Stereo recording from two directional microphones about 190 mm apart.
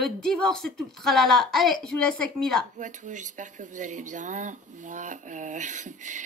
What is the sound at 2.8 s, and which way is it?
Speech, 40° right (ahead or behind).